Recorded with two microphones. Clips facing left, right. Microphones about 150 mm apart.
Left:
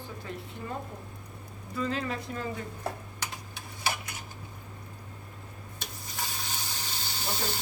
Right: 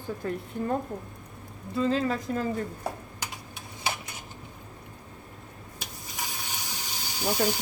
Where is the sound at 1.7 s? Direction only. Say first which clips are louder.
Right 6 dB; 30° right (ahead or behind).